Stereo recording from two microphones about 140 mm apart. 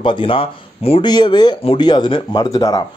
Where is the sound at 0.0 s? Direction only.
35° left (ahead or behind).